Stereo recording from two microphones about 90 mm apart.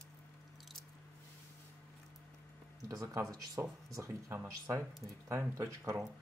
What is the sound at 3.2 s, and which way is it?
Speech, 40° right (ahead or behind).